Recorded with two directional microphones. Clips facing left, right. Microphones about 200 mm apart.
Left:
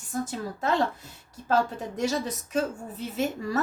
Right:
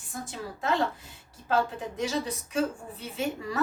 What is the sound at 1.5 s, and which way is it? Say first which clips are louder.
A woman's voice: left 2 dB; 45° left (ahead or behind).